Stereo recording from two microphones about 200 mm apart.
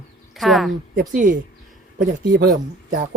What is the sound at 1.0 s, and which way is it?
Speech, 40° right (ahead or behind).